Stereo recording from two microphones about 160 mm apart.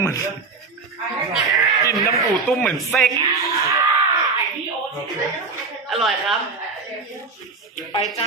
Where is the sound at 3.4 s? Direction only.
20° right (ahead or behind).